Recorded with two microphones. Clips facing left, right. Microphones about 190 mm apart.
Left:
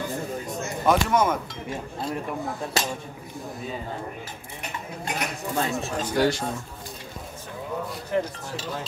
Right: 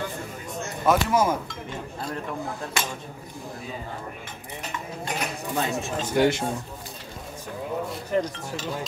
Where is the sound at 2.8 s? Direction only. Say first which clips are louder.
Left 3 dB; 35° left (ahead or behind).